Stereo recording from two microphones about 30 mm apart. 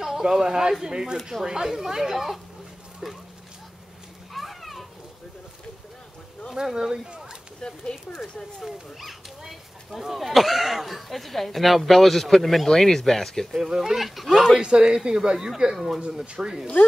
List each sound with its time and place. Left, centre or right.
0.0 s speech: centre
4.3 s a sound: centre
6.5 s speech: right
7.6 s speech: left
9.5 s a sound: centre
10.1 s speech: centre
13.5 s speech: centre
13.9 s speech: centre
14.6 s speech: right
15.7 s speech: centre
16.0 s speech: right